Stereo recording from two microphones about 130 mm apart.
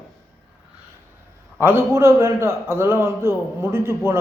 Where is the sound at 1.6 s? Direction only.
20° right (ahead or behind).